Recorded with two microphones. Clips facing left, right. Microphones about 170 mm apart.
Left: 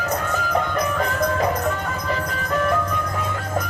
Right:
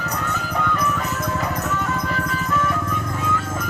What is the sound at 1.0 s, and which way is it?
Music, 50° left (ahead or behind).